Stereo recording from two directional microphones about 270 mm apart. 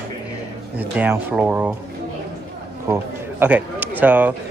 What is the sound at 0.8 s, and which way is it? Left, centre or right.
Speech, centre.